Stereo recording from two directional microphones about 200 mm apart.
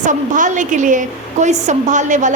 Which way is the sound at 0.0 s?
40° right (ahead or behind).